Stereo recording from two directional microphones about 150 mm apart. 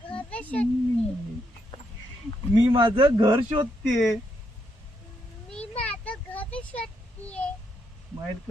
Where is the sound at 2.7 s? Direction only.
35° right (ahead or behind).